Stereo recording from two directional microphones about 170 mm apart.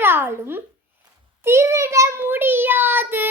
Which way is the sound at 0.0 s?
15° right (ahead or behind).